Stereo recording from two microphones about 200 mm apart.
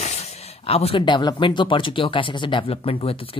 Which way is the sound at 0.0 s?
35° left (ahead or behind).